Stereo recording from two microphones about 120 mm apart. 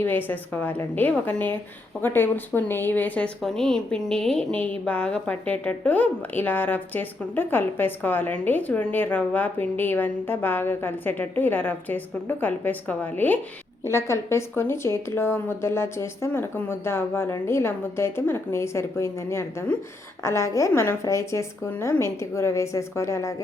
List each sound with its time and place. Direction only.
0.0 s a woman's voice: 15° left (ahead or behind)